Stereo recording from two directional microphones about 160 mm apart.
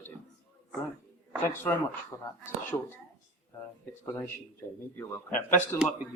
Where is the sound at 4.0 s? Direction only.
15° left (ahead or behind).